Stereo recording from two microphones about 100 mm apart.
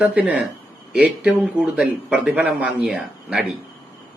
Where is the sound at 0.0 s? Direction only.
15° right (ahead or behind).